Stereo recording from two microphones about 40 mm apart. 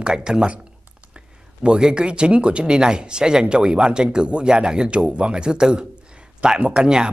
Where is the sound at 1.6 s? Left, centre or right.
Right.